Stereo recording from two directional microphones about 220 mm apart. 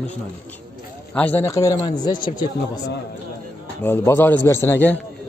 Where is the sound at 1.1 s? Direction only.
10° left (ahead or behind).